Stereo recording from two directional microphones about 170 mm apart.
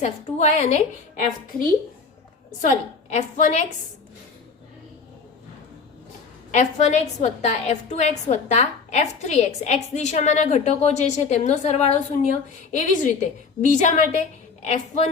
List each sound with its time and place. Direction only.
0.0 s a woman's voice: 40° left (ahead or behind)
2.6 s a woman's voice: 45° left (ahead or behind)
6.6 s a woman's voice: 45° left (ahead or behind)